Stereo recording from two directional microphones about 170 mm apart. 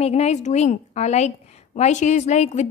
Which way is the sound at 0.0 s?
40° left (ahead or behind).